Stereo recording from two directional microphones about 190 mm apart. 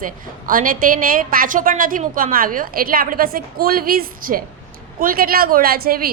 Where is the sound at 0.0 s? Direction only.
45° right (ahead or behind).